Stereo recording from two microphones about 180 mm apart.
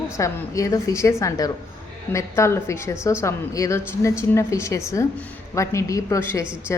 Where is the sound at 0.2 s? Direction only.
20° left (ahead or behind).